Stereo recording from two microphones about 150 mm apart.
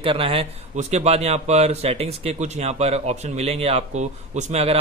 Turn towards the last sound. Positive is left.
turn(degrees=-45)  # may be behind; listen again after turning